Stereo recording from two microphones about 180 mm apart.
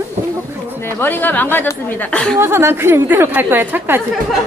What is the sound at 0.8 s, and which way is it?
Speech, 10° left (ahead or behind).